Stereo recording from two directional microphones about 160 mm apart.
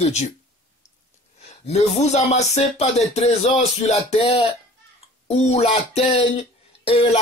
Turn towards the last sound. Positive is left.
turn(degrees=40)  # may be behind; listen again after turning